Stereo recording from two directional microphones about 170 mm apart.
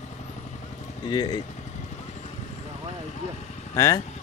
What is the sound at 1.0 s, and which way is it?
Speech, 25° left (ahead or behind).